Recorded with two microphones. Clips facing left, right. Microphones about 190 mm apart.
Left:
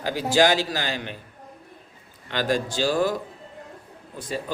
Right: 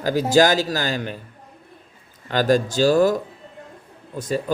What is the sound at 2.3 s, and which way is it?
Speech, 45° right (ahead or behind).